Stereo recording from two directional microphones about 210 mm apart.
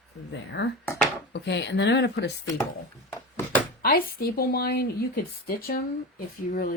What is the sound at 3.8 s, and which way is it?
Speech, 45° left (ahead or behind).